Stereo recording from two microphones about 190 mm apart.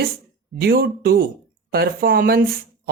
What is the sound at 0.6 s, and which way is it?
Speech, 50° right (ahead or behind).